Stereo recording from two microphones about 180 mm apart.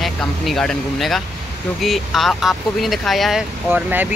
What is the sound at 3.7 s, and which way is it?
Speech, 10° right (ahead or behind).